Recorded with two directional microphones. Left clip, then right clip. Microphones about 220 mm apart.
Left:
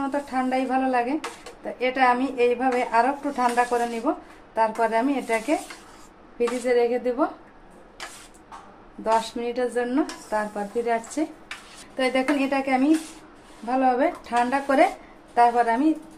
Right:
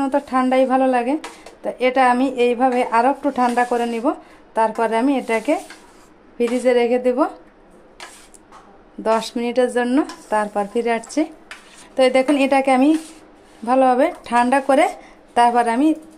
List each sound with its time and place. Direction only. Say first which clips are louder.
0.0 s a woman's voice: right 7 dB; 40° right (ahead or behind)
9.0 s a woman's voice: right 4 dB; 40° right (ahead or behind)